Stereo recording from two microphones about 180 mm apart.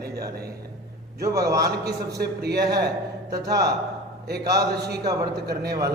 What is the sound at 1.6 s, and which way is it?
A man's voice, 60° right (ahead or behind).